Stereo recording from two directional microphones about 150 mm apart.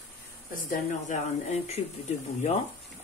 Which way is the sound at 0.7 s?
55° left (ahead or behind).